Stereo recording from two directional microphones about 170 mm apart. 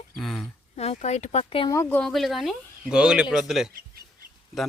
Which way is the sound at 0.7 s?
40° left (ahead or behind).